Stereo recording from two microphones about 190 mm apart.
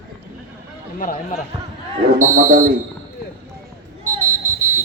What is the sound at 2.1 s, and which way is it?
Speech, 45° right (ahead or behind).